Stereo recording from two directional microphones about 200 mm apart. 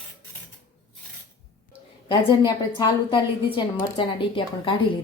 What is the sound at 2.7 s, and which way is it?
A woman's voice, 20° left (ahead or behind).